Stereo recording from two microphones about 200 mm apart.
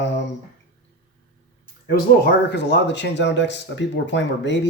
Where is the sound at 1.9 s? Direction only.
55° left (ahead or behind).